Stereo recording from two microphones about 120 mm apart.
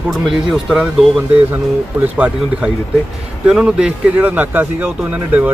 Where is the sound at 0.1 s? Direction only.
5° right (ahead or behind).